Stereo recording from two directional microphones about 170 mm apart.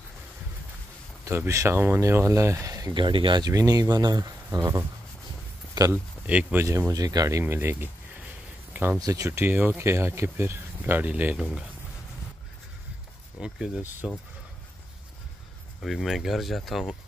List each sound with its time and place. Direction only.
1.2 s speech: 15° right (ahead or behind)
6.2 s speech: 10° right (ahead or behind)
9.0 s speech: 20° right (ahead or behind)
13.4 s speech: 5° right (ahead or behind)
15.8 s speech: centre (ahead or behind)